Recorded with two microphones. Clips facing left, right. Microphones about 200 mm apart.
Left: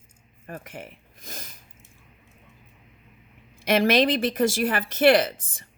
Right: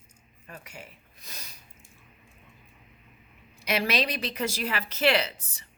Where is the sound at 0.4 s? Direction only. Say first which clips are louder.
Left 7 dB; 50° left (ahead or behind).